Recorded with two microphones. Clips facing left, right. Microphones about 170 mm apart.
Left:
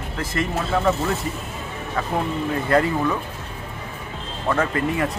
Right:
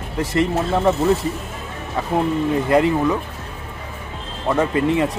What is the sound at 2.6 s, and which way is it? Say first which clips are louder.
Speech: right 2 dB; 15° right (ahead or behind).